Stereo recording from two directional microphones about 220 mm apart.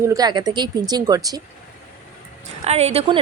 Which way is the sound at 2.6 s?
30° right (ahead or behind).